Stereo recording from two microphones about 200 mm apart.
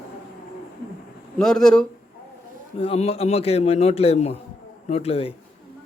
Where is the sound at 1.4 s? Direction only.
5° left (ahead or behind).